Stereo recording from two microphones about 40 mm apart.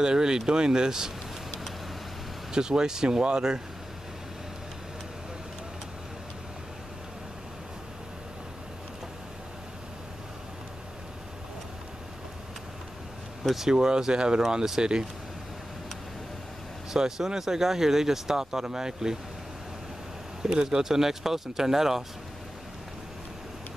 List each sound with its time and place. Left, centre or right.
0.0 s speech: centre
2.5 s speech: centre
13.4 s speech: centre
13.7 s speech: centre
16.9 s speech: centre
20.4 s speech: centre